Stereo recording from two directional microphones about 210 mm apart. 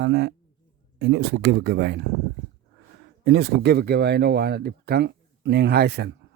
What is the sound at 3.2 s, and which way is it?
Speech, 55° right (ahead or behind).